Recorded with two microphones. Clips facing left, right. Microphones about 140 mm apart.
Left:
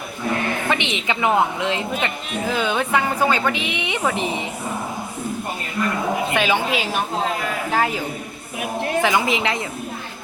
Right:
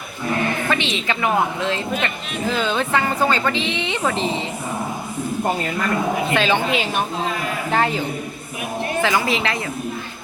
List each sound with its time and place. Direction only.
0.7 s a man's voice: 20° left (ahead or behind)
6.3 s a man's voice: 10° left (ahead or behind)
9.0 s a woman's voice: 15° left (ahead or behind)